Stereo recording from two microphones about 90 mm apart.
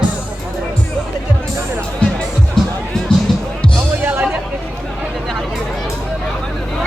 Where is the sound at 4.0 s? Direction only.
20° right (ahead or behind).